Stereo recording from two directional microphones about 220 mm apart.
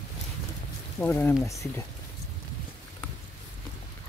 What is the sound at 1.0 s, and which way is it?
Speech, 10° left (ahead or behind).